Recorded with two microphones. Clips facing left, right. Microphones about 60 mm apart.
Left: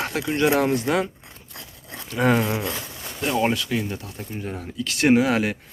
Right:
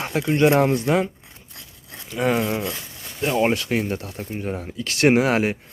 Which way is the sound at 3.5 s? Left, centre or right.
Right.